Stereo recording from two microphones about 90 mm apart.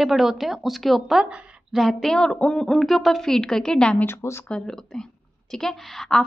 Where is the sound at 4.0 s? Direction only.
30° left (ahead or behind).